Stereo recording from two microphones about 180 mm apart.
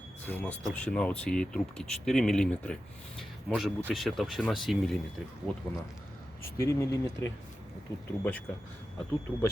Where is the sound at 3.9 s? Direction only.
Centre (ahead or behind).